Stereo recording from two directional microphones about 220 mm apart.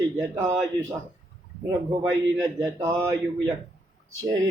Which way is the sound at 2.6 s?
15° right (ahead or behind).